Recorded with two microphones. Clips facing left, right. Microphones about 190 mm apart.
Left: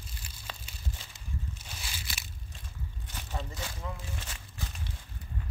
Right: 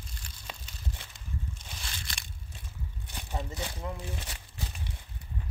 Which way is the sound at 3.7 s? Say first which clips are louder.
Right 3 dB; 30° right (ahead or behind).